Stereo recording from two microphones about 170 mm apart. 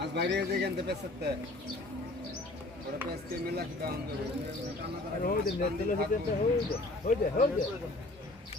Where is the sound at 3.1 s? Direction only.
70° right (ahead or behind).